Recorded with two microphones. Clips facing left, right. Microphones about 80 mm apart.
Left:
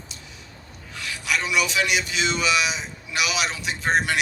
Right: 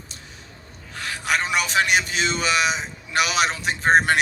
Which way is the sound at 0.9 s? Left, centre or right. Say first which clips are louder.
Right 3 dB; right.